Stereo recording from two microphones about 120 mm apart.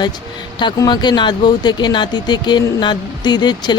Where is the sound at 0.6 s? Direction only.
35° left (ahead or behind).